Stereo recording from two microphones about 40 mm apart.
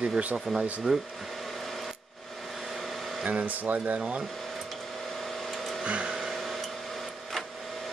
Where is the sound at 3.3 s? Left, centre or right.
Right.